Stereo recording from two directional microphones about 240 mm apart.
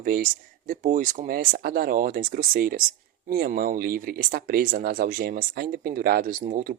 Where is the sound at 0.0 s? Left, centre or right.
Right.